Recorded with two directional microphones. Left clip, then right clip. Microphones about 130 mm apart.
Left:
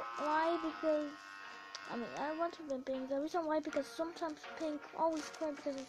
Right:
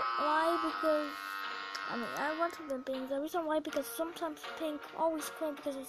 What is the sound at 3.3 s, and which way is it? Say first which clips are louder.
Speech: right 3 dB; 25° right (ahead or behind).